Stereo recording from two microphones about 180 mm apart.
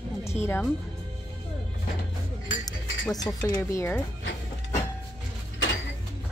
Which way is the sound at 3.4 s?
15° left (ahead or behind).